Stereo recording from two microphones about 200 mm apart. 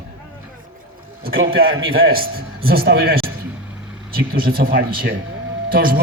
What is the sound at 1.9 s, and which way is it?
Speech, 50° right (ahead or behind).